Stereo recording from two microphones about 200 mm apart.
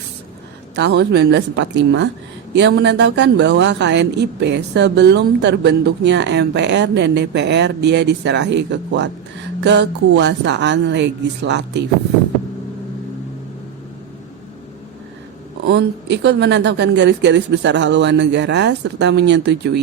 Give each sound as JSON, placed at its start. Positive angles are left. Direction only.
{"t": 0.8, "sound": "a man's voice", "side_deg": -55}
{"t": 15.6, "sound": "a man's voice", "side_deg": -60}